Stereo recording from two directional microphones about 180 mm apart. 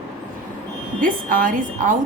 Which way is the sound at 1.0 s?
50° right (ahead or behind).